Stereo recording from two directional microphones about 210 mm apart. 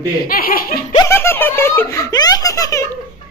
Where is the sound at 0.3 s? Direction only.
45° left (ahead or behind).